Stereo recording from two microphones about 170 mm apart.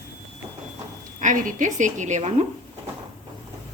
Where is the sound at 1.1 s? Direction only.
50° right (ahead or behind).